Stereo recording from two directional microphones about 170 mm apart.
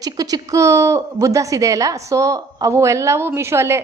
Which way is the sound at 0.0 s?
20° right (ahead or behind).